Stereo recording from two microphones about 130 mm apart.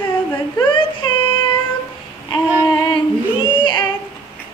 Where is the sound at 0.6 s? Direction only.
40° left (ahead or behind).